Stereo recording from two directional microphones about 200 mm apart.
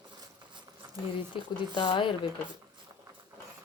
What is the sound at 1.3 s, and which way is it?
Speech, 25° left (ahead or behind).